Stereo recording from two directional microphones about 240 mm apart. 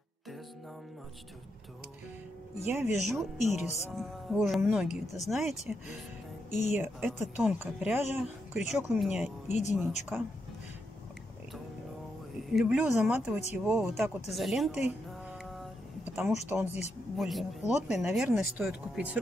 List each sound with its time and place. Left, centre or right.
2.6 s speech: centre
6.7 s speech: centre
12.5 s speech: centre
16.2 s speech: centre